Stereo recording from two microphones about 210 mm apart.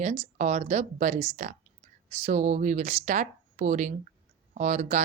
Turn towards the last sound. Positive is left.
turn(degrees=-35)  # may be behind; listen again after turning